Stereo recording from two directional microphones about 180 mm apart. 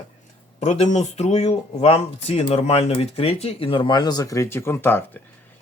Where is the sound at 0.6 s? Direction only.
40° left (ahead or behind).